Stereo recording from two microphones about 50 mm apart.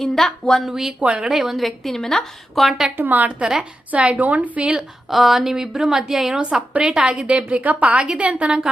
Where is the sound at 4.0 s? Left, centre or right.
Right.